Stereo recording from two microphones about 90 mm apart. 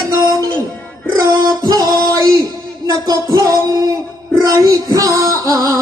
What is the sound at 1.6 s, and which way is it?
Music, 45° right (ahead or behind).